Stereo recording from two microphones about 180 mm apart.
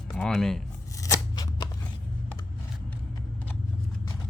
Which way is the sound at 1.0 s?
20° left (ahead or behind).